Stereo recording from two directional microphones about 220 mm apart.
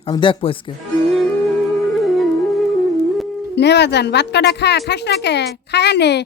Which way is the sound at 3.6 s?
50° left (ahead or behind).